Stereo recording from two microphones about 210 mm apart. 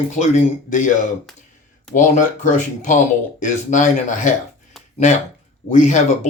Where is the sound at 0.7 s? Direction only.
35° left (ahead or behind).